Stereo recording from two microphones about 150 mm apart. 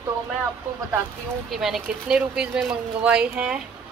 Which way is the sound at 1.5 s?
Centre (ahead or behind).